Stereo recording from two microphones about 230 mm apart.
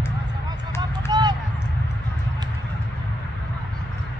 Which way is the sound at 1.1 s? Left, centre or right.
Centre.